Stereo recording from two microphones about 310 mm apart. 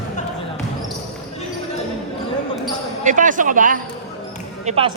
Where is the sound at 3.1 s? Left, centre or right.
Right.